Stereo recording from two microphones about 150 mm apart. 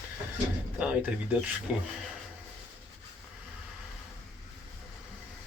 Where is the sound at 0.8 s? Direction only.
10° right (ahead or behind).